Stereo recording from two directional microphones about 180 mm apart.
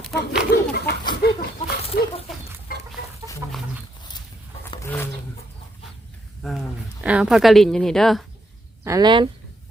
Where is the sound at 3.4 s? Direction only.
10° right (ahead or behind).